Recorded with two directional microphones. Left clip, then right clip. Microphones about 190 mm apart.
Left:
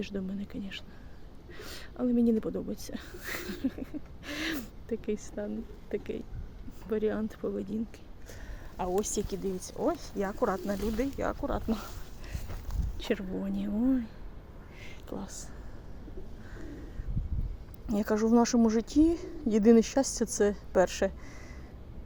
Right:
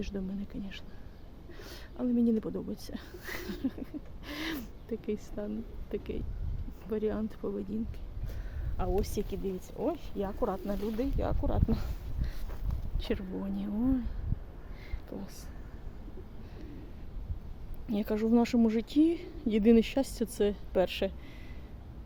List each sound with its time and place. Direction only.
0.0 s speech: 5° left (ahead or behind)
8.8 s speech: 5° left (ahead or behind)
10.2 s speech: 10° left (ahead or behind)
10.8 s speech: 55° left (ahead or behind)
11.0 s speech: 5° left (ahead or behind)
11.8 s a sound: 5° left (ahead or behind)
13.0 s speech: 5° left (ahead or behind)
15.1 s speech: 10° left (ahead or behind)
17.8 s speech: 10° left (ahead or behind)